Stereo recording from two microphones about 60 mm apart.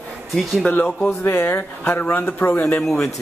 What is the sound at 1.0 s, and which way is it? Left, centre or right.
A man's voice, left.